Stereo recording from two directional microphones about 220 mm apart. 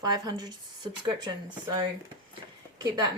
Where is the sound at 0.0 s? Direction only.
20° right (ahead or behind).